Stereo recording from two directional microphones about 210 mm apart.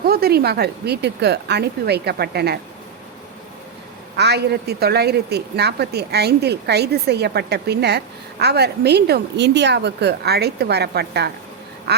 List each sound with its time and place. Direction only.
0.0 s a woman's voice: 45° right (ahead or behind)
4.2 s a woman's voice: 50° right (ahead or behind)